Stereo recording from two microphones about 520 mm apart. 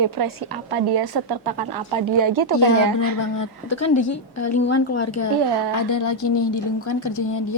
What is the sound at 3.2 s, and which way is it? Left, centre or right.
A woman's voice, left.